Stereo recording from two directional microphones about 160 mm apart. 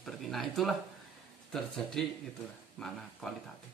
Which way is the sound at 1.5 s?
Centre (ahead or behind).